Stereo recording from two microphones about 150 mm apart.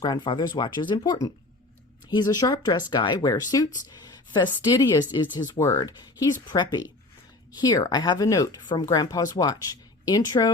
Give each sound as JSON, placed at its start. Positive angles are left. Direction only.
{"t": 0.0, "sound": "speech", "side_deg": 30}